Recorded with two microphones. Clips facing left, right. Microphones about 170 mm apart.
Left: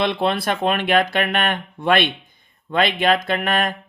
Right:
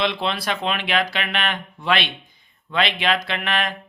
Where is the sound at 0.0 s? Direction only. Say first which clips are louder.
Left 4 dB; 50° left (ahead or behind).